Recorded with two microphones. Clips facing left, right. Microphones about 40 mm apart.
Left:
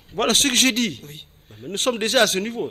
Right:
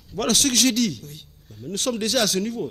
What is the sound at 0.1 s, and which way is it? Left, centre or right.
Speech, left.